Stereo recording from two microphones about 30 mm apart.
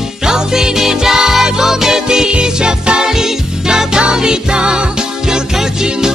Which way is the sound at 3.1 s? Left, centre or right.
Centre.